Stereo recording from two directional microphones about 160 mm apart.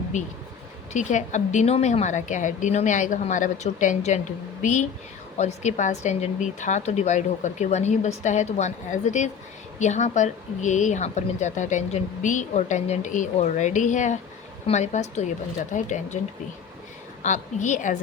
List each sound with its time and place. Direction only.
0.9 s speech: 50° left (ahead or behind)
17.2 s speech: 50° left (ahead or behind)